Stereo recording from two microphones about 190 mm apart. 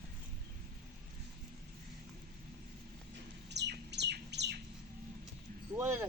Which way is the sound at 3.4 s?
65° right (ahead or behind).